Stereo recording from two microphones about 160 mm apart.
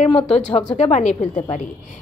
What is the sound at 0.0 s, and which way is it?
A woman's voice, 40° left (ahead or behind).